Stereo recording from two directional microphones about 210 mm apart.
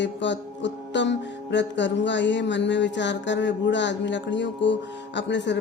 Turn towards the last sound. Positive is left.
turn(degrees=60)  # may be behind; listen again after turning